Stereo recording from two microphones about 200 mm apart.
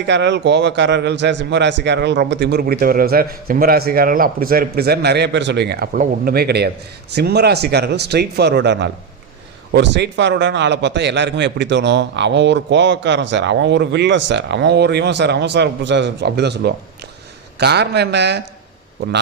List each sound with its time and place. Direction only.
0.1 s a man's voice: 60° right (ahead or behind)